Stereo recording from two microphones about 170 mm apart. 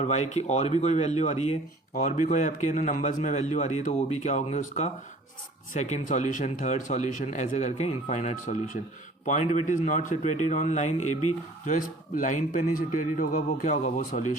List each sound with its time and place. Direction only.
0.0 s speech: 40° left (ahead or behind)